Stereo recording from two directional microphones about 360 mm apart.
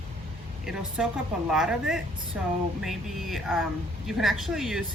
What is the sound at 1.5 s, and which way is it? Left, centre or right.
A woman's voice, centre.